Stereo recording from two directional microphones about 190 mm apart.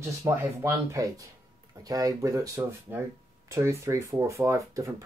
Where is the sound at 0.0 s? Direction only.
15° right (ahead or behind).